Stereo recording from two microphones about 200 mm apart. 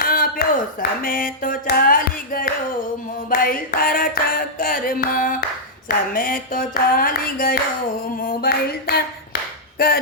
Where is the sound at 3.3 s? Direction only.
45° left (ahead or behind).